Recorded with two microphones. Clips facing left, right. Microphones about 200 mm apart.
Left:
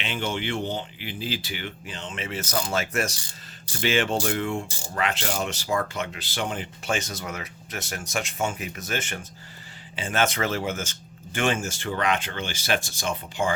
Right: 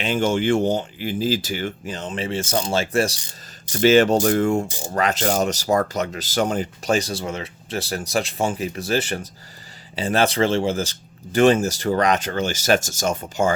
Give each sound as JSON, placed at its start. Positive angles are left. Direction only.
{"t": 0.0, "sound": "speech", "side_deg": -45}
{"t": 3.7, "sound": "speech", "side_deg": -40}